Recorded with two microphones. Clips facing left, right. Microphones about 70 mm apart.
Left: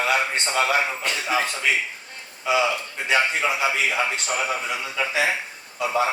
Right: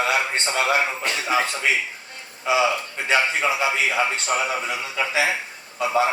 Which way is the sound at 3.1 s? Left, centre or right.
Right.